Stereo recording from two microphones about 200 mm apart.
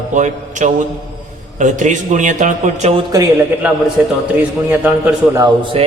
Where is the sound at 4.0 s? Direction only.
5° right (ahead or behind).